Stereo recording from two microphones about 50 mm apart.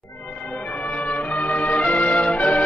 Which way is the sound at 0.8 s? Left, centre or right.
Left.